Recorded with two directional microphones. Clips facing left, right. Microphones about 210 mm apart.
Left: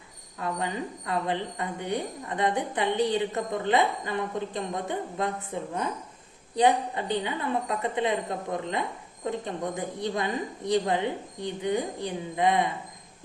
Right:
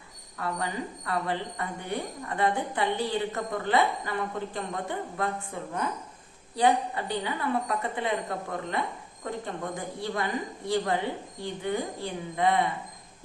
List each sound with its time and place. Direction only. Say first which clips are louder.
0.3 s a woman's voice: left 1 dB; 20° left (ahead or behind)